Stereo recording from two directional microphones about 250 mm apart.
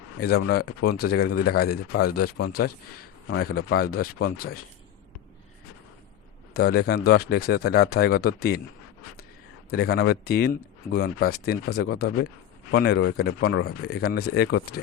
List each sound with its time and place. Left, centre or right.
0.2 s speech: left
6.5 s speech: left
9.6 s speech: left